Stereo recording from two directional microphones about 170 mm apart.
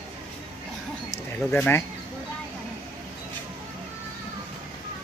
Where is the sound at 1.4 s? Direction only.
10° left (ahead or behind).